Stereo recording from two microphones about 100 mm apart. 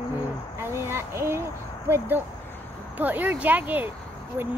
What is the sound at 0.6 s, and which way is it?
Speech, 25° right (ahead or behind).